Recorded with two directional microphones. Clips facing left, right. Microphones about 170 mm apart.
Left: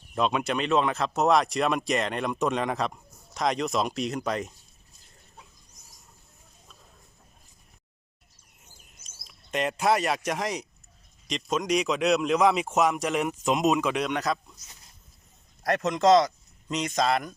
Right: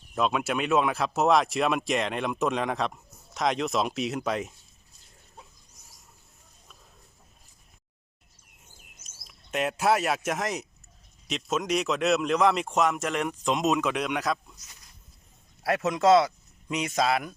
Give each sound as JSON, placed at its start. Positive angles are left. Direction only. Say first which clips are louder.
{"t": 0.1, "sound": "speech", "louder": "left 1 dB", "side_deg": 0}
{"t": 9.0, "sound": "speech", "louder": "left 1 dB", "side_deg": -5}
{"t": 15.6, "sound": "speech", "louder": "even", "side_deg": -5}